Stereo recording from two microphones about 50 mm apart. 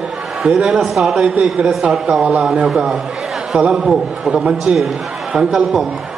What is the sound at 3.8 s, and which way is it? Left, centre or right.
A man's voice, centre.